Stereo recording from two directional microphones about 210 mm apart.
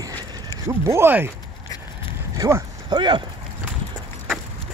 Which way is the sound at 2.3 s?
15° right (ahead or behind).